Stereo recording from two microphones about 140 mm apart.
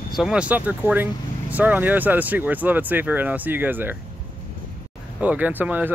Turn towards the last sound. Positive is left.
turn(degrees=-15)  # may be behind; listen again after turning